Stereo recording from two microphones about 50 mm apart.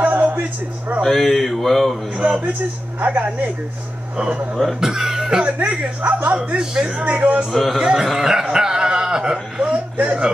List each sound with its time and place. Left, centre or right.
0.0 s music: right
1.0 s mantra: centre
2.1 s a man's voice: right
3.0 s speech: right
4.7 s speech: centre
5.4 s a man's voice: right
6.3 s a man's voice: centre
7.5 s mantra: centre
7.8 s a man's voice: centre; by 10.3 s right